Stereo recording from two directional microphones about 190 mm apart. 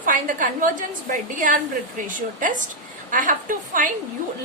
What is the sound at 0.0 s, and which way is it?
Speech, 45° right (ahead or behind).